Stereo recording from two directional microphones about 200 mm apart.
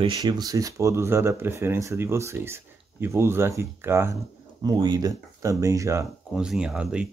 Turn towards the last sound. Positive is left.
turn(degrees=-5)  # may be behind; listen again after turning